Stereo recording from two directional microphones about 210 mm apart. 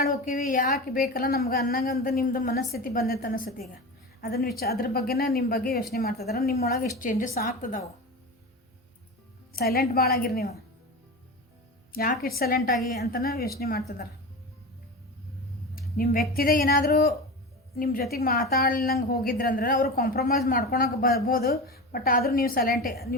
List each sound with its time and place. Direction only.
0.0 s a woman's voice: 40° left (ahead or behind)
9.5 s a woman's voice: 45° left (ahead or behind)
11.9 s a woman's voice: 45° left (ahead or behind)
16.0 s a woman's voice: 40° left (ahead or behind)